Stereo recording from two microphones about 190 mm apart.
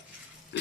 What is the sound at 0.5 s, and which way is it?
Pig, 70° left (ahead or behind).